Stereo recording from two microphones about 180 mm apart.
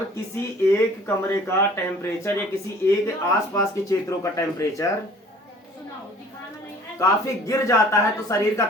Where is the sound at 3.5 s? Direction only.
15° left (ahead or behind).